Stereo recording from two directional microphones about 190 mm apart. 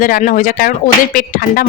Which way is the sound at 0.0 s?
45° left (ahead or behind).